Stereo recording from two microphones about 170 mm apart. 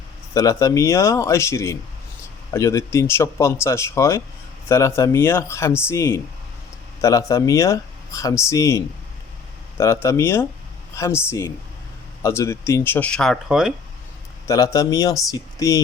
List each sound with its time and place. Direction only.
0.3 s speech: 20° left (ahead or behind); by 13.7 s 5° right (ahead or behind)
14.4 s speech: 20° left (ahead or behind)